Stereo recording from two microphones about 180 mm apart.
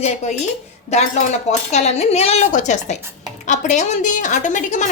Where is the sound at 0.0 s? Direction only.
40° left (ahead or behind).